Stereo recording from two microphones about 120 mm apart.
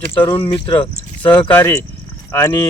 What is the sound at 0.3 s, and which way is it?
Speech, 40° left (ahead or behind).